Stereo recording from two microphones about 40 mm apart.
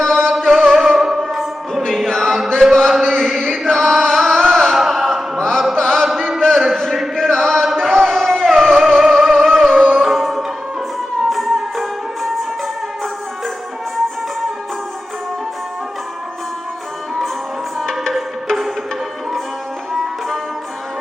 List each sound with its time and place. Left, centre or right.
0.0 s music: centre
0.8 s music: centre
2.0 s choir: centre
2.6 s mantra: centre
3.0 s chant: centre
4.1 s carnatic music: centre
4.7 s a sound: centre
5.4 s chant: centre
7.2 s chant: centre
7.8 s a sound: centre
9.0 s music: centre
10.0 s music: centre
19.9 s music: centre